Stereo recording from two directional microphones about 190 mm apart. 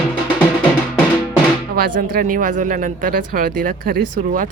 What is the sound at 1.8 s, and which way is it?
Speech, 50° right (ahead or behind).